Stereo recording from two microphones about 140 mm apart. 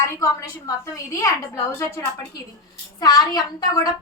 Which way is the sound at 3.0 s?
30° left (ahead or behind).